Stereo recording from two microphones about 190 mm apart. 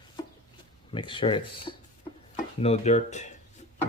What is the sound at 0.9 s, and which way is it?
Speech, 25° left (ahead or behind).